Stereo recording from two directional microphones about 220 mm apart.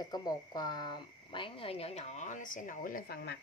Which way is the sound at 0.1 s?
20° left (ahead or behind).